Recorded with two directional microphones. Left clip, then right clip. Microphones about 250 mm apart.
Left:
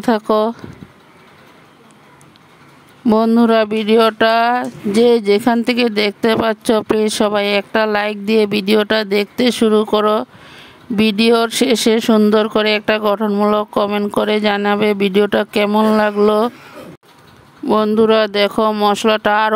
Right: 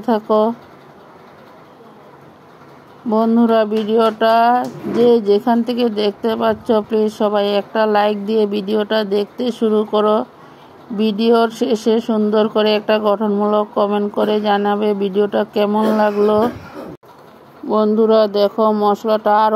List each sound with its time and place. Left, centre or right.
0.0 s speech: left
3.1 s speech: left
17.6 s speech: left
18.1 s speech: left
18.6 s speech: left
18.9 s speech: left